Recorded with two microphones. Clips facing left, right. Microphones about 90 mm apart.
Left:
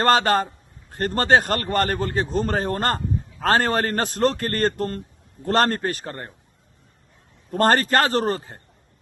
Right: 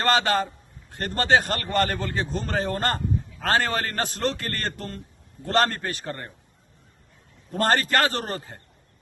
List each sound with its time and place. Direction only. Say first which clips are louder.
0.0 s a man's voice: left 4 dB; 40° left (ahead or behind)
7.5 s a man's voice: left 4 dB; 45° left (ahead or behind)